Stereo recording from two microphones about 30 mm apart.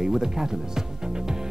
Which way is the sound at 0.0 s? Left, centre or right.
Centre.